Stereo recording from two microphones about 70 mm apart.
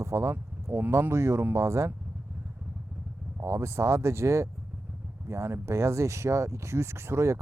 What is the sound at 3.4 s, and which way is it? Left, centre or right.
Speech, right.